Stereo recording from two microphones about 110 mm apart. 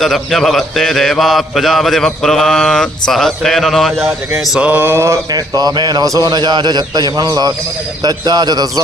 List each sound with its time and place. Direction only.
0.0 s speech: centre (ahead or behind)
4.5 s a sound: 10° right (ahead or behind)
4.8 s mantra: 25° right (ahead or behind)
5.3 s a man's voice: 35° right (ahead or behind)